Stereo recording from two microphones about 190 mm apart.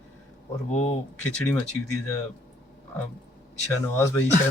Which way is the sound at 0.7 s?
35° left (ahead or behind).